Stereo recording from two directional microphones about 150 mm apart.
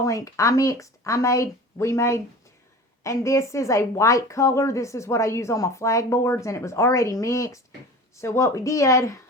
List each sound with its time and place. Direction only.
0.0 s a woman's voice: 20° left (ahead or behind)